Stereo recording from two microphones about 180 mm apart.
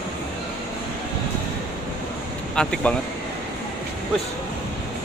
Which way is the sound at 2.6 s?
5° left (ahead or behind).